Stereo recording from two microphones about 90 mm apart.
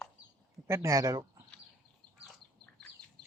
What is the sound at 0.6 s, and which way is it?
Speech, 35° right (ahead or behind).